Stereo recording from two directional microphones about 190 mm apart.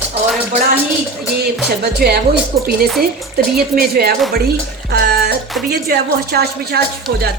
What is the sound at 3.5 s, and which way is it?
A woman's voice, 55° right (ahead or behind).